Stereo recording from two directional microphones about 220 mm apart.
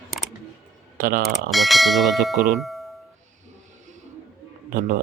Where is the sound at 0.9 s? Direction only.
40° right (ahead or behind).